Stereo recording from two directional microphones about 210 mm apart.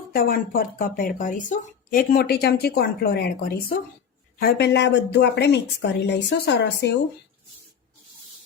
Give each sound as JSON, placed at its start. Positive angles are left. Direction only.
{"t": 0.1, "sound": "a woman's voice", "side_deg": 45}